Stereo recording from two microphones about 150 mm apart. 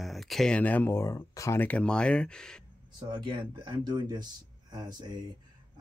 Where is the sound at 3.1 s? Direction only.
30° right (ahead or behind).